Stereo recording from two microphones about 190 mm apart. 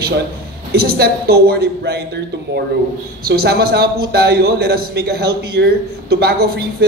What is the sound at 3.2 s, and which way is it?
A man's voice, 55° right (ahead or behind).